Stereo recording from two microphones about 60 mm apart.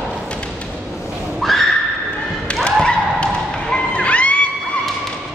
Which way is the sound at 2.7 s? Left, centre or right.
Centre.